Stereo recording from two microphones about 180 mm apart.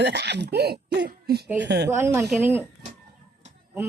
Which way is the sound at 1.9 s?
15° right (ahead or behind).